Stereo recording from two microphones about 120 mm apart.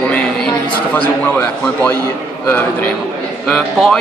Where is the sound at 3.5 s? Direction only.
5° left (ahead or behind).